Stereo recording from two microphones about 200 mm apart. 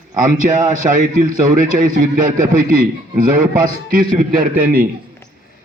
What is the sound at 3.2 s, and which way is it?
A man's voice, 45° right (ahead or behind).